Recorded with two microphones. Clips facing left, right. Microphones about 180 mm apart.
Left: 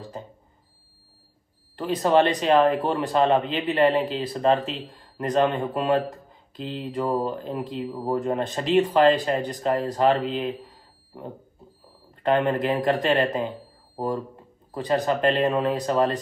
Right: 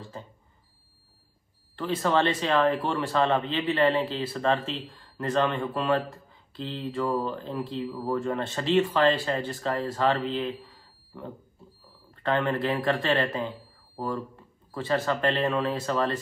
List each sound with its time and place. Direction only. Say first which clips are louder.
1.8 s speech: left 5 dB; 15° left (ahead or behind)
12.2 s speech: left 4 dB; 15° left (ahead or behind)